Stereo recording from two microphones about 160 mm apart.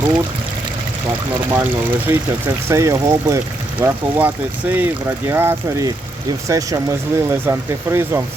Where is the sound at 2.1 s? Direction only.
15° right (ahead or behind).